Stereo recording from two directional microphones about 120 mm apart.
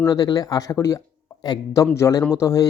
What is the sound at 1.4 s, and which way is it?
Speech, 35° left (ahead or behind).